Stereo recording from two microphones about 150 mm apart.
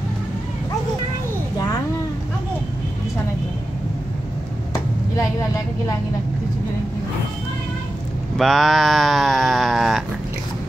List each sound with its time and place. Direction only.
5.1 s a woman's voice: 25° left (ahead or behind)
8.4 s speech: centre (ahead or behind)